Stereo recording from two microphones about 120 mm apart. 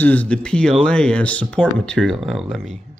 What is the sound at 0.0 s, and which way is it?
Speech, 10° left (ahead or behind).